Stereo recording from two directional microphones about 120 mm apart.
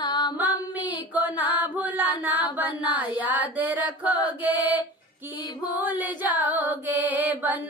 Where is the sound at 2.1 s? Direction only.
15° right (ahead or behind).